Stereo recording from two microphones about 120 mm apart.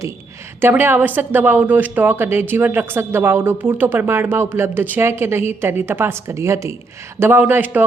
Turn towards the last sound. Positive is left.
turn(degrees=-15)  # may be behind; listen again after turning